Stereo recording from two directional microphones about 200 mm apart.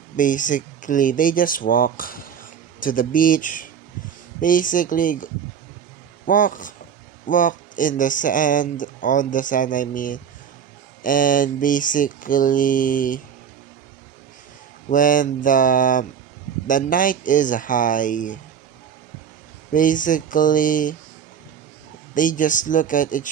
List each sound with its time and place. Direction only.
0.2 s speech: 40° left (ahead or behind)
14.8 s speech: 40° left (ahead or behind)
19.7 s speech: 40° left (ahead or behind)
22.1 s speech: 40° left (ahead or behind)